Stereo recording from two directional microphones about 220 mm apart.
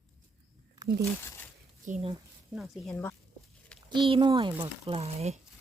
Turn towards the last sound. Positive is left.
turn(degrees=-30)  # may be behind; listen again after turning